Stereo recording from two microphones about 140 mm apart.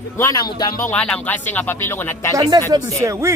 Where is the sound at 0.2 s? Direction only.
25° left (ahead or behind).